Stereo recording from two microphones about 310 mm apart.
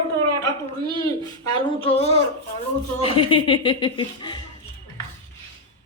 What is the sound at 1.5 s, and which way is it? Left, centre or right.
Speech, centre.